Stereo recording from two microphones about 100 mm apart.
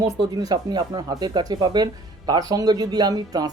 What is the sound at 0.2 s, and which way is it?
Speech, 40° right (ahead or behind).